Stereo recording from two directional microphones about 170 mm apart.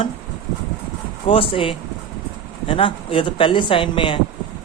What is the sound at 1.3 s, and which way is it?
Speech, 30° left (ahead or behind).